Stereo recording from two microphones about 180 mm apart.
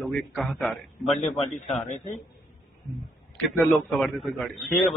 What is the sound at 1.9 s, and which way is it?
Speech, 35° left (ahead or behind).